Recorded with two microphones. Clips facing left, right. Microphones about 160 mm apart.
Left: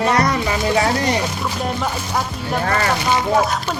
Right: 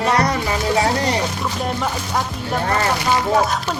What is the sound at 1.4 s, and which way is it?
Speech, centre (ahead or behind).